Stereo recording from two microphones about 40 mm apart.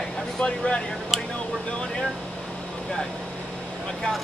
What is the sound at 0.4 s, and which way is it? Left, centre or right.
Speech, left.